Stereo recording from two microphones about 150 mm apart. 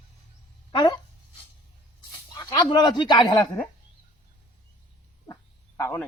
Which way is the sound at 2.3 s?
25° left (ahead or behind).